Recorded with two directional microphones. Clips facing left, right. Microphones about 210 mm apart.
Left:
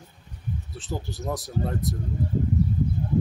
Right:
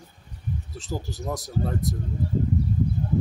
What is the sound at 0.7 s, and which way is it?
Speech, centre (ahead or behind).